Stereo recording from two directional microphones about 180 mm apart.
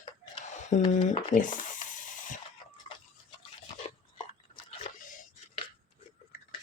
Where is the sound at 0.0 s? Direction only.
40° left (ahead or behind).